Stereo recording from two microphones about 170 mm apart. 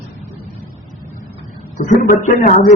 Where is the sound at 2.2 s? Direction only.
50° left (ahead or behind).